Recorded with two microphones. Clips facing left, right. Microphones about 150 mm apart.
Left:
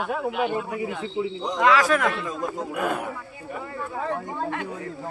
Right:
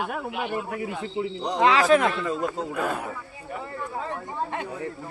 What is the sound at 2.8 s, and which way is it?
Speech, 10° left (ahead or behind).